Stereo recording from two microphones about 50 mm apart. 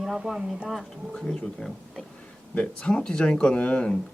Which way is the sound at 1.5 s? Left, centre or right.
Centre.